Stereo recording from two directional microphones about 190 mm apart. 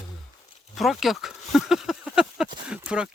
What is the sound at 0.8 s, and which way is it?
Speech, centre (ahead or behind).